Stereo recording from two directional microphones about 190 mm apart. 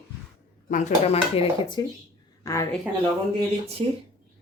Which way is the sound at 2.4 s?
15° left (ahead or behind).